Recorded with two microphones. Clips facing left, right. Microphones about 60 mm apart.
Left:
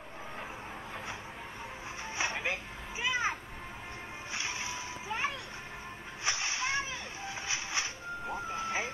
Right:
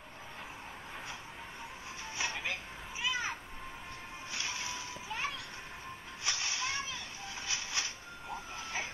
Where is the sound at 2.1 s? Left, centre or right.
Left.